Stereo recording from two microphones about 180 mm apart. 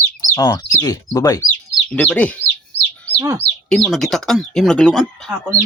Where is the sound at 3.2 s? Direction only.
15° right (ahead or behind).